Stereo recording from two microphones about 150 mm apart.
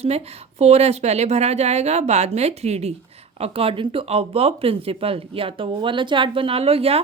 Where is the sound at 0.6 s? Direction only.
45° right (ahead or behind).